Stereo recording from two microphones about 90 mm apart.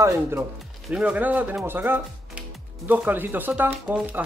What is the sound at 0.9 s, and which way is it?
Speech, 15° right (ahead or behind).